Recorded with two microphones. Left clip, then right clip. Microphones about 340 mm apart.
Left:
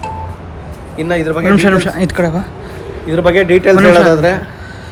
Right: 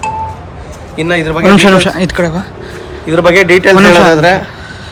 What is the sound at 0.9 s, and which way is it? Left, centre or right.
Speech, right.